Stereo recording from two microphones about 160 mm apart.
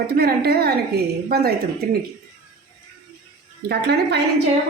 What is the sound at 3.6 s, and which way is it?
Speech, 90° right.